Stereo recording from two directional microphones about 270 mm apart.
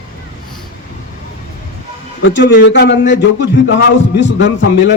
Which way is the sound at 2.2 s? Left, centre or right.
Left.